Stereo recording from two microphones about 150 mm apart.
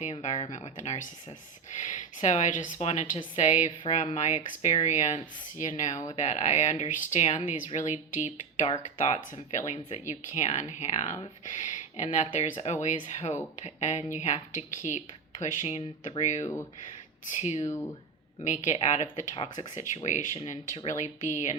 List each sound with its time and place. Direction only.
0.0 s speech: 50° left (ahead or behind)
11.4 s a sound: 55° left (ahead or behind)
12.0 s speech: 50° left (ahead or behind)
17.6 s speech: 20° left (ahead or behind)
18.4 s speech: 55° left (ahead or behind)